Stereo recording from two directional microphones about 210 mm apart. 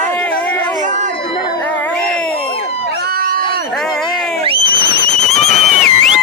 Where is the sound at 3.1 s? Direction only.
45° right (ahead or behind).